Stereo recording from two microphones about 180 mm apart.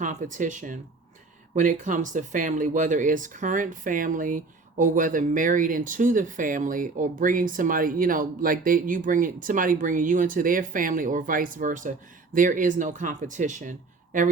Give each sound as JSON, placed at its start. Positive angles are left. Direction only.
{"t": 0.0, "sound": "speech", "side_deg": -45}